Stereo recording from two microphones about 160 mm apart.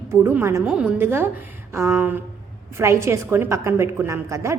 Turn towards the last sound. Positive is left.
turn(degrees=-20)  # may be behind; listen again after turning